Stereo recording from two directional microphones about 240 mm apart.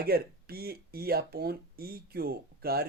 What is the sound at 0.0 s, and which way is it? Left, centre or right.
Speech, right.